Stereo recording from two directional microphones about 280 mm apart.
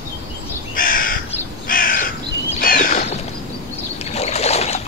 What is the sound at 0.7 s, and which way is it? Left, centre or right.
Crow, left.